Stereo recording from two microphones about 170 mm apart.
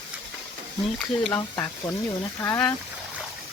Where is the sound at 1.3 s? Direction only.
20° left (ahead or behind).